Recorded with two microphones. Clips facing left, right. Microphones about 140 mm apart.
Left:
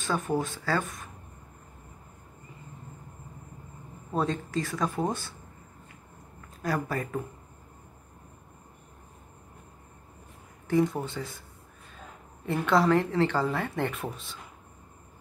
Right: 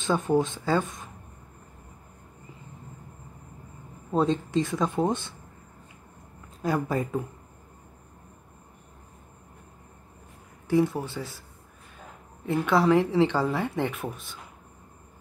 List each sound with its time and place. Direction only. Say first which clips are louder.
0.0 s speech: right 5 dB; 20° right (ahead or behind)
4.1 s speech: right 5 dB; 20° right (ahead or behind)
6.6 s speech: right 4 dB; 20° right (ahead or behind)
10.7 s speech: right 2 dB; 5° right (ahead or behind)
12.4 s speech: right 2 dB; 5° right (ahead or behind)
13.9 s speech: right 1 dB; centre (ahead or behind)